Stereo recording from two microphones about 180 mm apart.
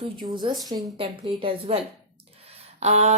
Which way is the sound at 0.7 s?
30° right (ahead or behind).